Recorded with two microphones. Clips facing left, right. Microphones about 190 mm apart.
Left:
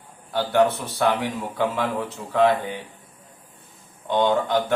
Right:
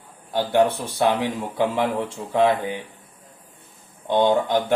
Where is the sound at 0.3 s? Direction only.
20° right (ahead or behind).